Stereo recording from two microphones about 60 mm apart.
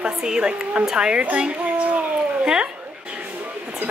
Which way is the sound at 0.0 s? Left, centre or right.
Centre.